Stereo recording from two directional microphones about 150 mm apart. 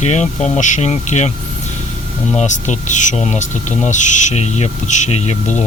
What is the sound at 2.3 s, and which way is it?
Speech, 50° left (ahead or behind).